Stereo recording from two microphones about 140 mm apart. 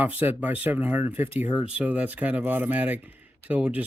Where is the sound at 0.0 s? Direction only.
15° right (ahead or behind).